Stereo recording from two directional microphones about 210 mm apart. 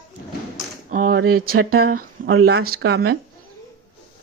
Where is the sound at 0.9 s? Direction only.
50° right (ahead or behind).